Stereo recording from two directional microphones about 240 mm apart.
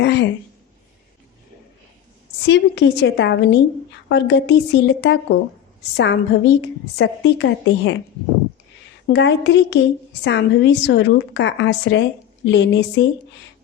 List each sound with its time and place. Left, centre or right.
0.0 s a woman's voice: left
2.5 s a woman's voice: left
9.0 s a woman's voice: left